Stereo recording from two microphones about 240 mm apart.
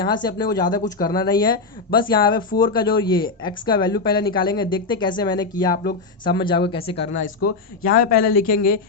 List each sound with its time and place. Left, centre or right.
0.0 s speech: centre
5.7 s speech: left
6.2 s speech: centre
6.9 s speech: left